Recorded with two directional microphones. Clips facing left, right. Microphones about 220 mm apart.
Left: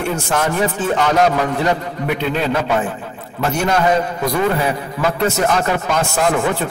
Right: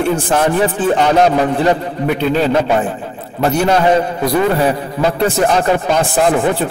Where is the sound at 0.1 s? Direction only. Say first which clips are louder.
Right 5 dB; 35° right (ahead or behind).